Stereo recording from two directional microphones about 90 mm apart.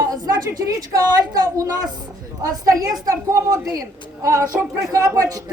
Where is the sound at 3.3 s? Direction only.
40° right (ahead or behind).